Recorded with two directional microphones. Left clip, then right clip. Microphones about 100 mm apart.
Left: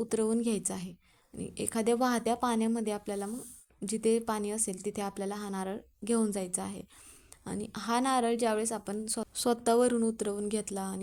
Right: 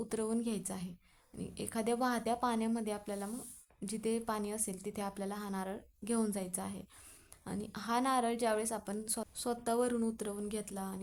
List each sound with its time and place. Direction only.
0.0 s a woman's voice: 40° left (ahead or behind)
9.3 s speech: 75° left (ahead or behind); by 11.0 s 55° left (ahead or behind)